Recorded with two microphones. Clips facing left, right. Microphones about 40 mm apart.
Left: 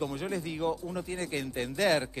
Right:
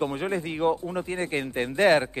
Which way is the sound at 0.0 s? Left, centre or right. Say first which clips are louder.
Right 6 dB; right.